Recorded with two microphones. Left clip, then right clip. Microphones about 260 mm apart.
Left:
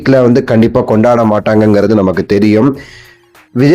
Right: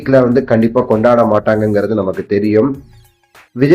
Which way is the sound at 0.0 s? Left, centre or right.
Left.